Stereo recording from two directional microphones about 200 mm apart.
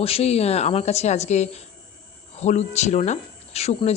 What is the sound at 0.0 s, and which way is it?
Speech, 30° left (ahead or behind).